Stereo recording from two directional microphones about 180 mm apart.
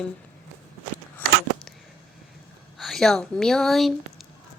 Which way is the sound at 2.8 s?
Centre (ahead or behind).